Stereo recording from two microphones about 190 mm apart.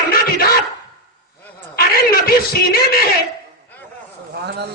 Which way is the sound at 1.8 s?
50° left (ahead or behind).